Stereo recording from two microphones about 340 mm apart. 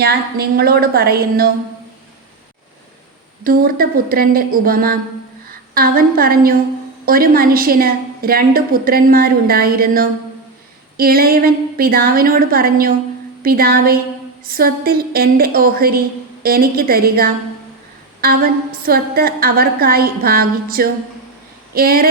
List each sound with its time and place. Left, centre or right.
0.0 s a woman's voice: right
3.4 s a woman's voice: right